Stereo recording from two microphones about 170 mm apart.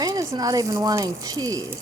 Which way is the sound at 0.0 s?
20° right (ahead or behind).